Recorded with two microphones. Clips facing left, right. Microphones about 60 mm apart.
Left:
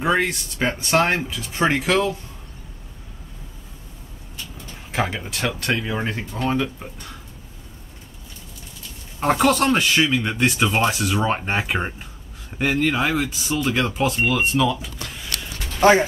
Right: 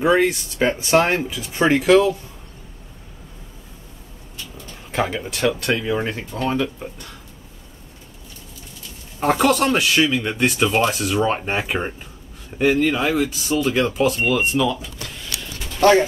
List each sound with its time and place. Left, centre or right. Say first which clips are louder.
0.0 s speech: right 4 dB; centre
4.9 s speech: right 2 dB; centre
9.2 s speech: right 1 dB; centre
15.8 s speech: right 1 dB; centre